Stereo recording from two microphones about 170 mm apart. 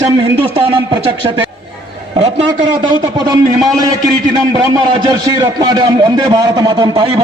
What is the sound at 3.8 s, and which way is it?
A man's voice, 20° right (ahead or behind).